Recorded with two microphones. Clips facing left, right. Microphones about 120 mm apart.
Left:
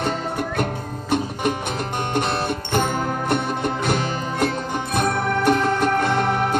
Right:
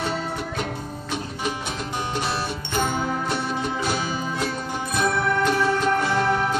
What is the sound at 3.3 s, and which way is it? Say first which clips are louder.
Music: left 4 dB; 55° left (ahead or behind).